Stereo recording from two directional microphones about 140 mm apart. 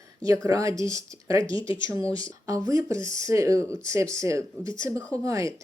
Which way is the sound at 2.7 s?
20° right (ahead or behind).